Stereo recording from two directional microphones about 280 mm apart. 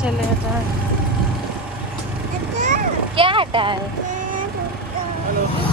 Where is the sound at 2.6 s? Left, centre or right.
Right.